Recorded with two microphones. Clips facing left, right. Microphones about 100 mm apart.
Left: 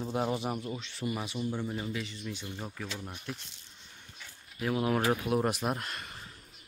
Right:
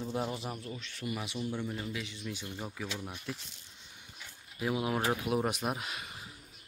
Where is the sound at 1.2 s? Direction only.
5° left (ahead or behind).